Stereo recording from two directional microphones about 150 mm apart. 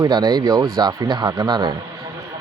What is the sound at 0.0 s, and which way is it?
Speech, 30° right (ahead or behind).